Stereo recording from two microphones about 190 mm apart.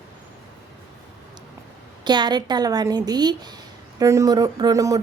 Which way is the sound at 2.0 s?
25° right (ahead or behind).